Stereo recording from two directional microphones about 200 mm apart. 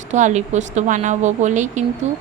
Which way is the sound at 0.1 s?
35° right (ahead or behind).